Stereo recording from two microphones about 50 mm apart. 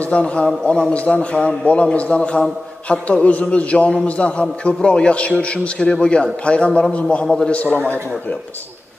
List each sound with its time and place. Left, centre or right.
0.0 s a man's voice: left